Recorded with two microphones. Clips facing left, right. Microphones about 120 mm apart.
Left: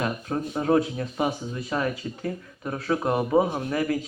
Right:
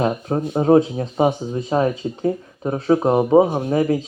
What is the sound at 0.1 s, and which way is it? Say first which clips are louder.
Speech: right 7 dB; 30° right (ahead or behind).